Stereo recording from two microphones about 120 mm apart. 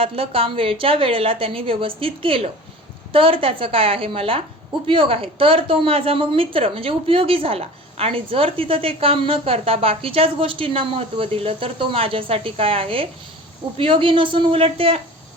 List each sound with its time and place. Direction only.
0.0 s a woman's voice: 50° right (ahead or behind)